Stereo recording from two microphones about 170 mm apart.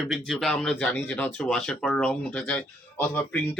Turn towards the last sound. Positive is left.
turn(degrees=10)  # may be behind; listen again after turning